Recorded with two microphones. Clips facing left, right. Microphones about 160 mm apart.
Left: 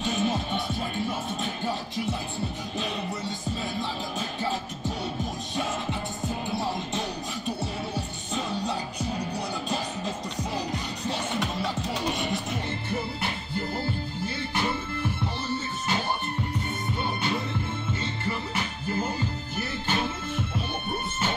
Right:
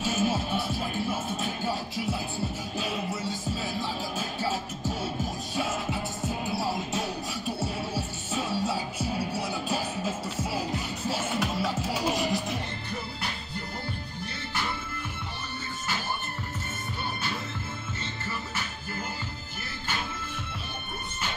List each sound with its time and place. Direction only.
0.0 s music: 5° right (ahead or behind)
14.2 s music: 25° left (ahead or behind)